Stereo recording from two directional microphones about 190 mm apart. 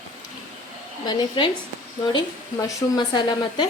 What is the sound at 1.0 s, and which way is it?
A woman's voice, 25° left (ahead or behind).